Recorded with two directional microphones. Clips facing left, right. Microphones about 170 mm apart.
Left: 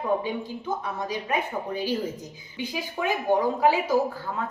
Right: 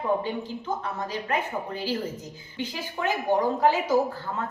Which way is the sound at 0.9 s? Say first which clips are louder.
Left 1 dB; 15° left (ahead or behind).